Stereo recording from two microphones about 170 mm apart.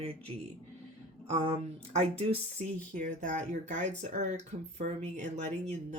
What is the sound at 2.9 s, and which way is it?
Speech, 50° right (ahead or behind).